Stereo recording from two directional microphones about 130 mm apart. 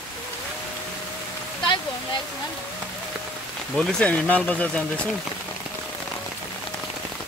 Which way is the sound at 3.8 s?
10° left (ahead or behind).